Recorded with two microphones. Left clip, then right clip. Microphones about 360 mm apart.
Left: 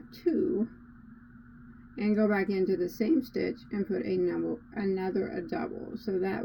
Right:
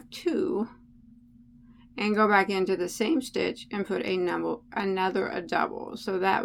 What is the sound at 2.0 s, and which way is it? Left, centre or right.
Speech, centre.